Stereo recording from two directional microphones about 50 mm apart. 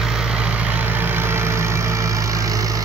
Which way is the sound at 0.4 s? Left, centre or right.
Right.